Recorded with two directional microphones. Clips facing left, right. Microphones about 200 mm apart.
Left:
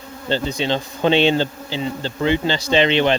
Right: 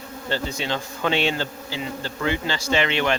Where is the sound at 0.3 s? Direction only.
25° left (ahead or behind).